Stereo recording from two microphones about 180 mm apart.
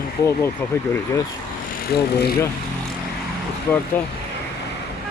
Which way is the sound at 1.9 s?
60° left (ahead or behind).